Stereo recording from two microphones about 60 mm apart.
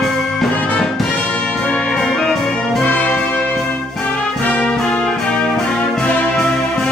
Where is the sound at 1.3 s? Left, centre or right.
Centre.